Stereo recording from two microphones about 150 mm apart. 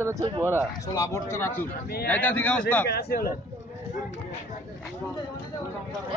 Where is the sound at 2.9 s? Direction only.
90° left.